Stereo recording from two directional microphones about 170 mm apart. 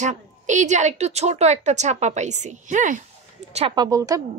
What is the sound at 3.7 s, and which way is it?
Speech, 20° right (ahead or behind).